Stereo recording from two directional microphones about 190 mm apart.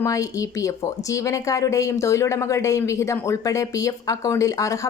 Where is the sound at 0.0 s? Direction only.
15° left (ahead or behind).